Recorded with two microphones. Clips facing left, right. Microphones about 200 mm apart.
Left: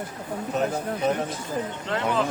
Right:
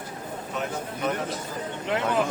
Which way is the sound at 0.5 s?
35° left (ahead or behind).